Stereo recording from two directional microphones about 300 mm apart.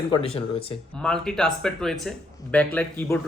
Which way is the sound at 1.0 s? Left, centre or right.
Centre.